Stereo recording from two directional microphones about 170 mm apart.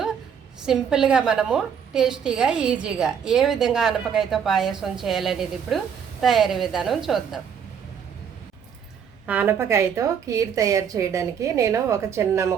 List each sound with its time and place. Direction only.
0.6 s a woman's voice: 5° right (ahead or behind)
9.2 s a woman's voice: 10° right (ahead or behind)